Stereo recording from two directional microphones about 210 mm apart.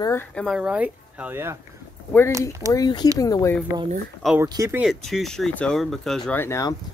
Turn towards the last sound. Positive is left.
turn(degrees=15)  # may be behind; listen again after turning